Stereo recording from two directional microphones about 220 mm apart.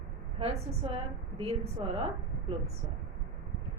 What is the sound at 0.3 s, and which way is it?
A woman's voice, 25° right (ahead or behind).